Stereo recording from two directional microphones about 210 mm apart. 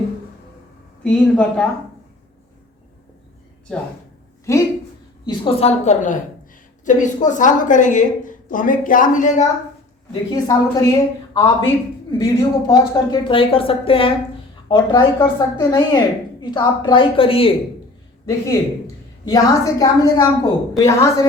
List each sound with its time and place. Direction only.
1.0 s a woman's voice: 5° left (ahead or behind)
4.5 s a woman's voice: 15° left (ahead or behind); by 9.5 s 35° left (ahead or behind)
10.1 s a woman's voice: 20° left (ahead or behind)
19.3 s a woman's voice: 15° left (ahead or behind)